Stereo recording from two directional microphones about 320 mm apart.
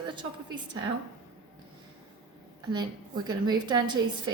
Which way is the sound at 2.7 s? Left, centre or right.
Centre.